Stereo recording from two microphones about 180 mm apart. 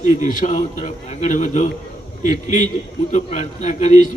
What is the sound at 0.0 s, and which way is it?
A man's voice, 45° left (ahead or behind).